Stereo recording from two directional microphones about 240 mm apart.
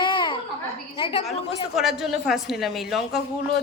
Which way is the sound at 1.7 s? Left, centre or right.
Centre.